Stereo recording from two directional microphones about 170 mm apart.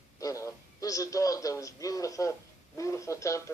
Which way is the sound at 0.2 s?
20° left (ahead or behind).